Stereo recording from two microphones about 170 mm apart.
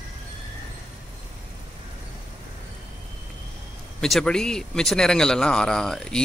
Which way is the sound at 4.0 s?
5° left (ahead or behind).